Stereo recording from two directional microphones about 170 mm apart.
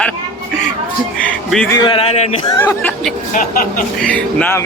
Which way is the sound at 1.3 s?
5° left (ahead or behind).